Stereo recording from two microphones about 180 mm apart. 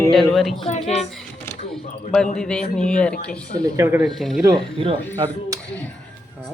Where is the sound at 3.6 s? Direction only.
15° right (ahead or behind).